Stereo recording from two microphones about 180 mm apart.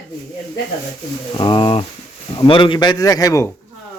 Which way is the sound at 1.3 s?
25° left (ahead or behind).